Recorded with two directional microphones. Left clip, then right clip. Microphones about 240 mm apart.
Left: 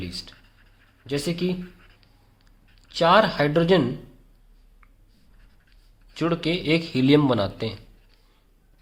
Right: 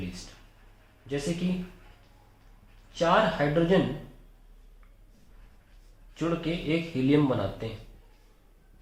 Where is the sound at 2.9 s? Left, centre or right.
Left.